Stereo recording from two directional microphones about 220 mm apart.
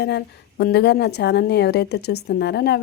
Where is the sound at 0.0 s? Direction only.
50° left (ahead or behind).